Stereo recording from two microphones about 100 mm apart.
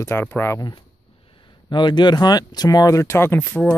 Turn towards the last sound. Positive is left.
turn(degrees=25)  # may be behind; listen again after turning